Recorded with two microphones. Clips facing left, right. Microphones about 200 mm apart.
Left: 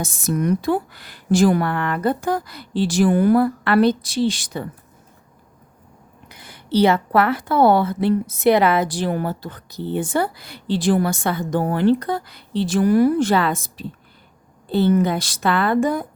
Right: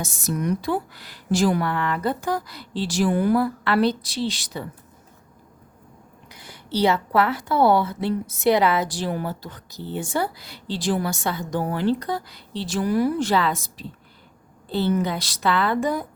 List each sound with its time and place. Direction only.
0.0 s a woman's voice: 55° left (ahead or behind)
6.3 s a woman's voice: 55° left (ahead or behind)